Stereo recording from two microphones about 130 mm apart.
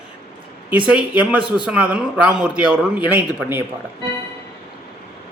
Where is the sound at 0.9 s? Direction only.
10° right (ahead or behind).